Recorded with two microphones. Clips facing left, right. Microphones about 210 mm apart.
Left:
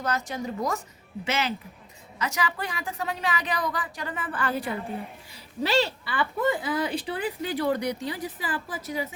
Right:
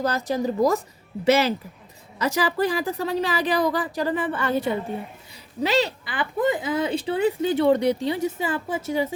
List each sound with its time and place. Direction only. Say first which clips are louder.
0.0 s a woman's voice: right 6 dB; 35° right (ahead or behind)